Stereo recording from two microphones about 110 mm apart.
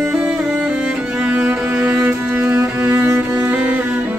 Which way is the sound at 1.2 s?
10° right (ahead or behind).